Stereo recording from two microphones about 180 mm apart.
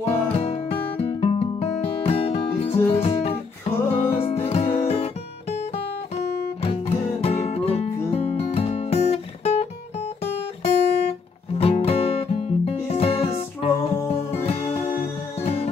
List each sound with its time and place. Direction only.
0.0 s music: 35° left (ahead or behind)
6.6 s music: 35° left (ahead or behind)